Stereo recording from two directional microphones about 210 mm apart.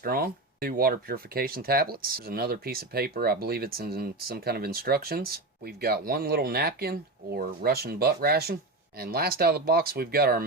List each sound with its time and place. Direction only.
0.0 s speech: 45° right (ahead or behind)